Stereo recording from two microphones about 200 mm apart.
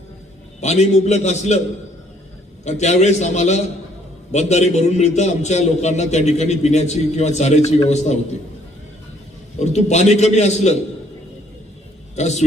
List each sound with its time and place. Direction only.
0.6 s a man's voice: 35° left (ahead or behind)
2.6 s a man's voice: 35° left (ahead or behind)
9.6 s a man's voice: 35° left (ahead or behind)
12.1 s a man's voice: 35° left (ahead or behind)